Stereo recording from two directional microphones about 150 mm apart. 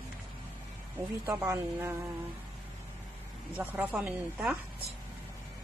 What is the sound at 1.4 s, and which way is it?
Speech, 15° right (ahead or behind).